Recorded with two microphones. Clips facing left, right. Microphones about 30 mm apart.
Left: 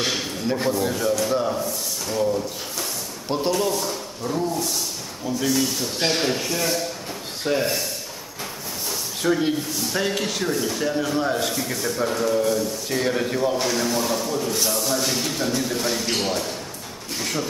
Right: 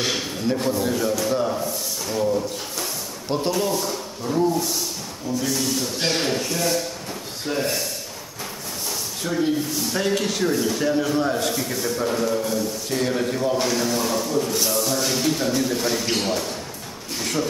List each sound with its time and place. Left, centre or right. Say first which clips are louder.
0.0 s a sound: right 1 dB; centre
0.7 s a man's voice: left 2 dB; centre
9.2 s speech: left 3 dB; centre
9.6 s speech: right 1 dB; centre